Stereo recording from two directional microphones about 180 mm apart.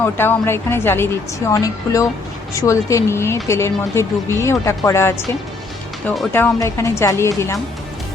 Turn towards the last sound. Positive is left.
turn(degrees=15)  # may be behind; listen again after turning